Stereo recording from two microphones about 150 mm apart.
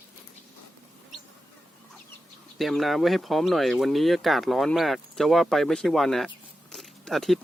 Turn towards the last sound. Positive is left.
turn(degrees=0)  # may be behind; listen again after turning